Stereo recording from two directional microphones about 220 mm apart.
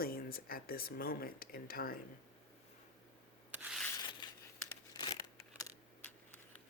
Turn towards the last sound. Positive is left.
turn(degrees=20)  # may be behind; listen again after turning